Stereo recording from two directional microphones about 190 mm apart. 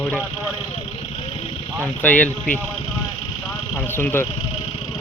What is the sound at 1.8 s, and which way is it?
Speech, 10° left (ahead or behind).